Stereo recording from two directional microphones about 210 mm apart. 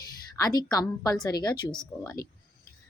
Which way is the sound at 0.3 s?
20° left (ahead or behind).